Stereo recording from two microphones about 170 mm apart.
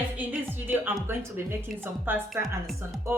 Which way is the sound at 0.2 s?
10° right (ahead or behind).